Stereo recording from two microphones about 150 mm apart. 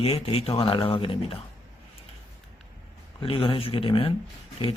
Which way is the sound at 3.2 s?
35° left (ahead or behind).